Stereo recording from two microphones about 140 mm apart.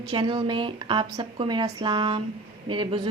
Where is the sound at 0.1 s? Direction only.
35° right (ahead or behind).